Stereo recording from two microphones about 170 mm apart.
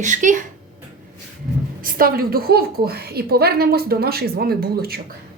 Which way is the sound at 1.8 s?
55° right (ahead or behind).